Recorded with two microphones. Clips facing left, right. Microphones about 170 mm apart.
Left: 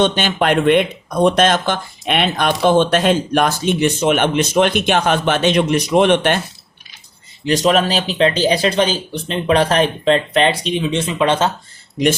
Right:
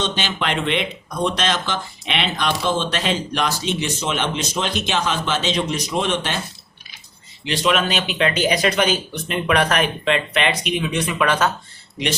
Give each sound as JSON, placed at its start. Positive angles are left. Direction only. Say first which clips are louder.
{"t": 0.0, "sound": "speech", "louder": "left 8 dB", "side_deg": 50}
{"t": 7.4, "sound": "speech", "louder": "left 5 dB", "side_deg": 40}